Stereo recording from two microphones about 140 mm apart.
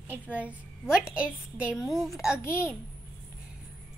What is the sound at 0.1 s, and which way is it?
A woman's voice, 10° right (ahead or behind).